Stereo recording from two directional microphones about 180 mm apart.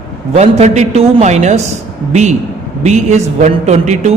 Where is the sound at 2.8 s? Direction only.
40° right (ahead or behind).